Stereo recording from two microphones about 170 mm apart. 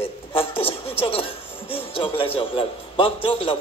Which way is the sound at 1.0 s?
30° left (ahead or behind).